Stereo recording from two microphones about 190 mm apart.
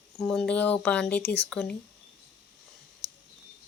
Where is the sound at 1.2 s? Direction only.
60° left (ahead or behind).